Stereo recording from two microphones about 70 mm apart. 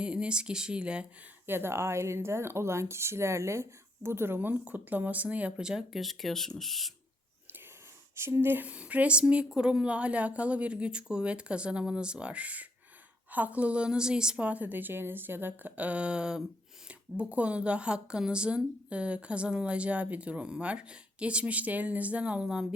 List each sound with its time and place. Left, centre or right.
0.0 s speech: centre
1.5 s speech: right; by 6.9 s centre
8.1 s speech: right
8.7 s a woman's voice: centre